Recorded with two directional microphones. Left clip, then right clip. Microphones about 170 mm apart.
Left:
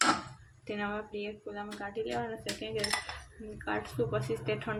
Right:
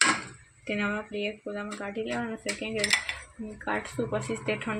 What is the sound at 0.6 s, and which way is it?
Speech, 25° right (ahead or behind).